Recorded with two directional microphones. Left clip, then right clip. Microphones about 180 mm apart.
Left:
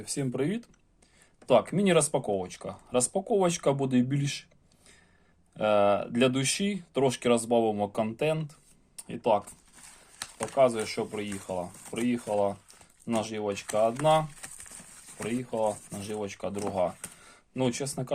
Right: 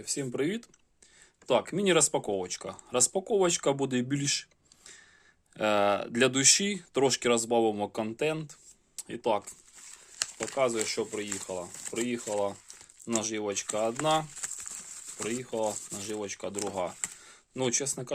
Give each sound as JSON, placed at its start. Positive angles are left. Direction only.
{"t": 0.0, "sound": "speech", "side_deg": -15}
{"t": 5.5, "sound": "speech", "side_deg": -35}
{"t": 10.6, "sound": "speech", "side_deg": -25}